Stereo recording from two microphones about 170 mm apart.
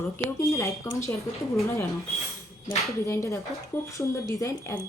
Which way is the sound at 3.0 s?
15° left (ahead or behind).